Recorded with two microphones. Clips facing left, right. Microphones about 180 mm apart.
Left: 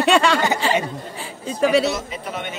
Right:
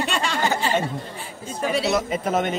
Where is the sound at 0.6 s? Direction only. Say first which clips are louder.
Left 2 dB; 90° left.